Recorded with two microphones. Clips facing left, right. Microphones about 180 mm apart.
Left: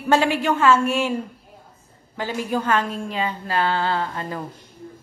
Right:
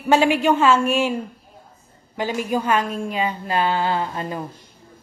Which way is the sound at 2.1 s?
15° right (ahead or behind).